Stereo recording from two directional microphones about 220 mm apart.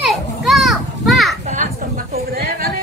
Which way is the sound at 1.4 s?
35° right (ahead or behind).